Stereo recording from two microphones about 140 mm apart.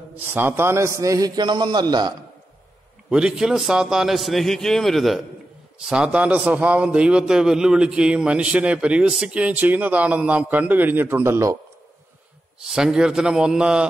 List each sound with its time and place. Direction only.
0.1 s a man's voice: 15° right (ahead or behind); by 2.1 s 30° right (ahead or behind)
3.1 s a man's voice: 5° right (ahead or behind)
12.6 s a man's voice: 5° right (ahead or behind)